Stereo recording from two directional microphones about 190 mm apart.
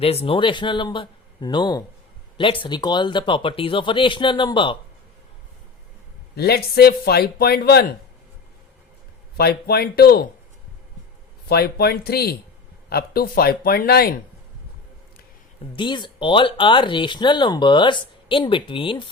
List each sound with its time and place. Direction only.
0.0 s speech: 30° left (ahead or behind)
6.3 s a man's voice: 55° left (ahead or behind)
9.4 s a man's voice: 55° left (ahead or behind)
11.4 s a man's voice: 55° left (ahead or behind)
15.7 s speech: 25° left (ahead or behind)